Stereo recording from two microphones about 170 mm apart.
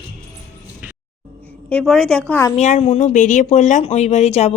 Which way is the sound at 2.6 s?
40° left (ahead or behind).